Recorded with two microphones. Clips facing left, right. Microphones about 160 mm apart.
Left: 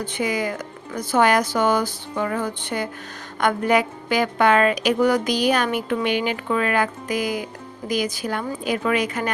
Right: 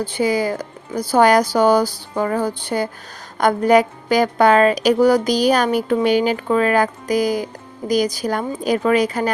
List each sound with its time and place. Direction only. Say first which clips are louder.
0.0 s a woman's voice: right 5 dB; 30° right (ahead or behind)